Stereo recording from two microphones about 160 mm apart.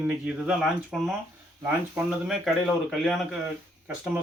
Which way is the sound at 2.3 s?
Centre (ahead or behind).